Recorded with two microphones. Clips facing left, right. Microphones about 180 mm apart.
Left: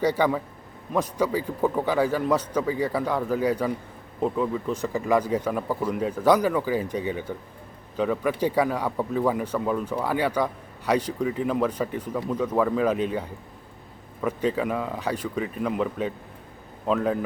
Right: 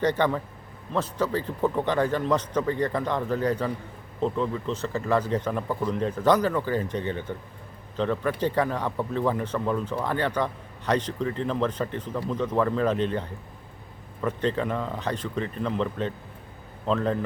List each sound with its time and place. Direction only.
0.0 s a man's voice: 10° left (ahead or behind)